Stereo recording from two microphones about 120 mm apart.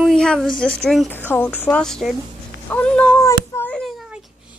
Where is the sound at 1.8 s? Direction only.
5° left (ahead or behind).